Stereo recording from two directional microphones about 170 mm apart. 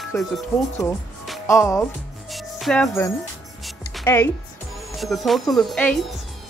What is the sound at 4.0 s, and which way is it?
Speech, 15° left (ahead or behind).